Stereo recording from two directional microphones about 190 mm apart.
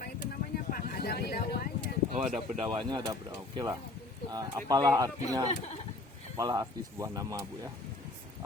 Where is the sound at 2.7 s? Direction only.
25° right (ahead or behind).